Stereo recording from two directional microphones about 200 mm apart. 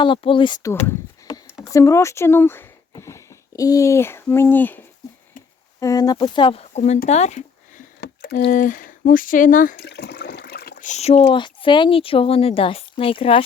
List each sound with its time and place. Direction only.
0.0 s speech: 25° left (ahead or behind)
8.0 s speech: 55° left (ahead or behind); by 13.4 s 25° left (ahead or behind)